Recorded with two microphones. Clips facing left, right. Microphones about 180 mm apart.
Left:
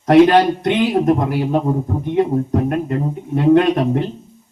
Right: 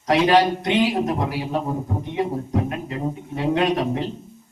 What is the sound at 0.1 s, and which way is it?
Speech, 55° left (ahead or behind).